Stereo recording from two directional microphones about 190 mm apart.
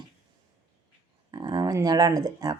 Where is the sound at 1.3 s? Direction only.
25° right (ahead or behind).